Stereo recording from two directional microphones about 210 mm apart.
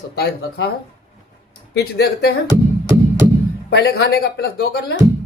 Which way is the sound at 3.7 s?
50° left (ahead or behind).